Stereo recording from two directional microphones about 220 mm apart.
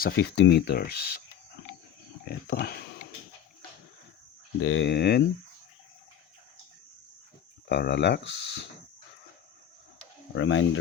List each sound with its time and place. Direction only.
0.0 s speech: 50° left (ahead or behind)
2.2 s speech: 45° left (ahead or behind)
4.6 s speech: 60° left (ahead or behind)
7.7 s speech: 50° left (ahead or behind)
10.3 s speech: 60° left (ahead or behind)